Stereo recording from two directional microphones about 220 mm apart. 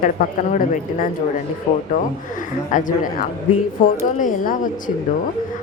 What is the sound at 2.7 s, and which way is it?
A woman's voice, 35° left (ahead or behind).